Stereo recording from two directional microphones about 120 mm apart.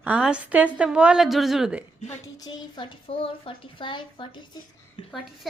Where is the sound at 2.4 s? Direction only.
40° left (ahead or behind).